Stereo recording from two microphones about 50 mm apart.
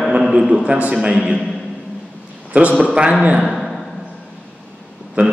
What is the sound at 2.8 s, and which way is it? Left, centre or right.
Speech, right.